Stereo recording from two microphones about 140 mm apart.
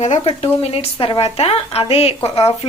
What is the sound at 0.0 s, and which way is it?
A woman's voice, 50° left (ahead or behind).